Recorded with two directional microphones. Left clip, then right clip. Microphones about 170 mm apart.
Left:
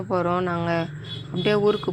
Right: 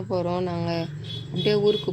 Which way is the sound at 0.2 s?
5° left (ahead or behind).